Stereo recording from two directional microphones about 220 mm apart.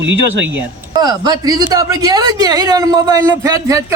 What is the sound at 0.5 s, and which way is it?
Speech, 20° right (ahead or behind).